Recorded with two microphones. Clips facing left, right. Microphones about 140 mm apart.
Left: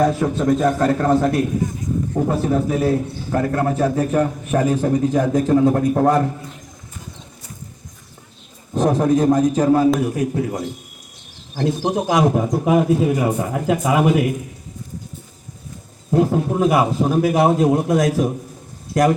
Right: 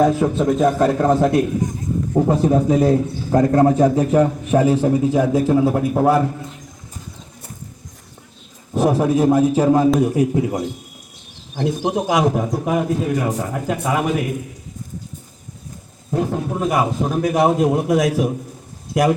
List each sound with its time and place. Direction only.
0.2 s a man's voice: 15° right (ahead or behind)
8.7 s a man's voice: 5° right (ahead or behind)
11.9 s a man's voice: centre (ahead or behind)
16.1 s a man's voice: 5° left (ahead or behind)